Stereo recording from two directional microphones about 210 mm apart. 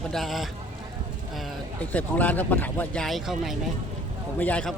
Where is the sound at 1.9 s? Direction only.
5° left (ahead or behind).